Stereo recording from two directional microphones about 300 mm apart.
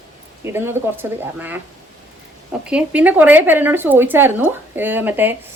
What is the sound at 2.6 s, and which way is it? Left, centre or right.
A woman's voice, centre.